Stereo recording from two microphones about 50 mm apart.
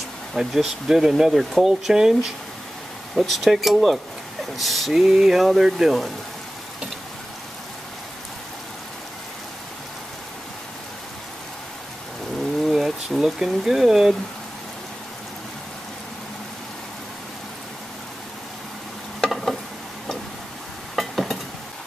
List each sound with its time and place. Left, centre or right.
0.3 s speech: centre
3.2 s speech: centre
5.0 s speech: centre
5.4 s speech: centre
12.6 s speech: centre
19.2 s stir: centre
20.9 s a sound: centre